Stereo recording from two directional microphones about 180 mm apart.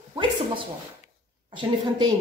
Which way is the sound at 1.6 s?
25° right (ahead or behind).